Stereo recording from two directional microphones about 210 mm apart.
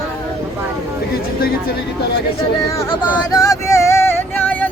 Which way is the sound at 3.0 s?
10° left (ahead or behind).